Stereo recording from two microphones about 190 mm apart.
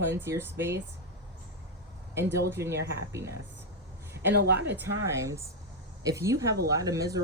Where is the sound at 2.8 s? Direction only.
60° right (ahead or behind).